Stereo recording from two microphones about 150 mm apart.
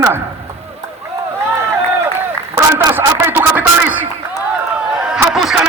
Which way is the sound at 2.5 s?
20° right (ahead or behind).